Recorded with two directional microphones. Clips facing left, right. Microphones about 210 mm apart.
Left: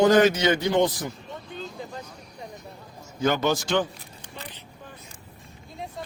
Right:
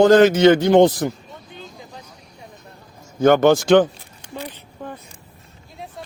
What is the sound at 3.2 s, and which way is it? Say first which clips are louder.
Speech: right 10 dB; 55° right (ahead or behind).